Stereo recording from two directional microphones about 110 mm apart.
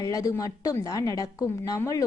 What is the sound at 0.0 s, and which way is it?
A woman's voice, 30° left (ahead or behind).